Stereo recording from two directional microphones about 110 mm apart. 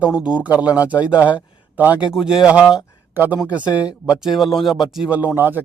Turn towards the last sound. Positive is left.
turn(degrees=-15)  # may be behind; listen again after turning